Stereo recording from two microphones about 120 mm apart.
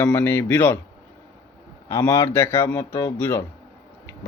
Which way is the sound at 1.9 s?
25° left (ahead or behind).